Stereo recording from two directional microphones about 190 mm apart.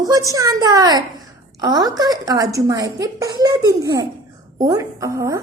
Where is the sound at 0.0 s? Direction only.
20° right (ahead or behind).